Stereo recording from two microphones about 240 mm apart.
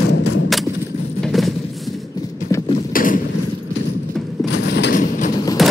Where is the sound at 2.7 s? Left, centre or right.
Left.